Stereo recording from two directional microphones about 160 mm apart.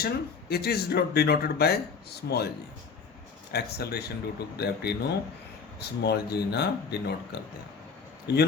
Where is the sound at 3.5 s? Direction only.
85° left.